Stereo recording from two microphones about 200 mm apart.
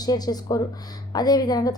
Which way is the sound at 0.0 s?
20° left (ahead or behind).